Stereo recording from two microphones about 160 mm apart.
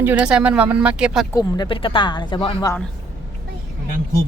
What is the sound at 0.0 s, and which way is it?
Speech, 10° right (ahead or behind).